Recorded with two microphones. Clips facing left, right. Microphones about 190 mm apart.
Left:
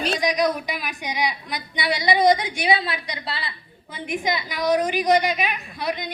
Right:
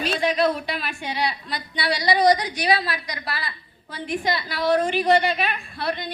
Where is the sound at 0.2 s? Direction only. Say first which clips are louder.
Right 3 dB; 15° left (ahead or behind).